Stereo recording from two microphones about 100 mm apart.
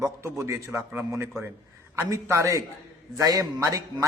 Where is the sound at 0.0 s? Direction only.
30° right (ahead or behind).